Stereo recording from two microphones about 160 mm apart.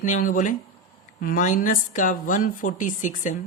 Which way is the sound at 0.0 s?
55° left (ahead or behind).